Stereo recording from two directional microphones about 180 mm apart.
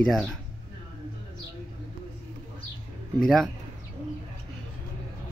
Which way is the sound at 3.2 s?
Centre (ahead or behind).